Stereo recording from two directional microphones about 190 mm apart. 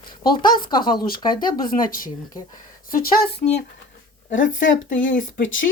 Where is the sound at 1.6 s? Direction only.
45° left (ahead or behind).